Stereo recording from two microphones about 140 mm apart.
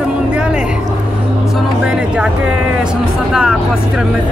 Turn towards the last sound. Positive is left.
turn(degrees=-5)  # may be behind; listen again after turning